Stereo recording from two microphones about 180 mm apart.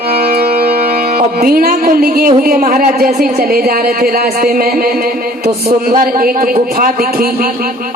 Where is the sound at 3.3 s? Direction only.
55° right (ahead or behind).